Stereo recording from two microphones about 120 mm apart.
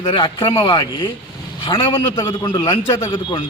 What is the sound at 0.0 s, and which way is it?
A man's voice, 45° left (ahead or behind).